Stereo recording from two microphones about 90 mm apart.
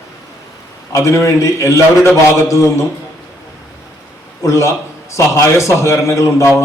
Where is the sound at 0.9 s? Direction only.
35° left (ahead or behind).